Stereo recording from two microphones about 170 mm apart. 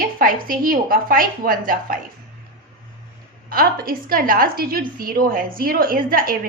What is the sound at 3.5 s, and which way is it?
A woman's voice, 60° right (ahead or behind).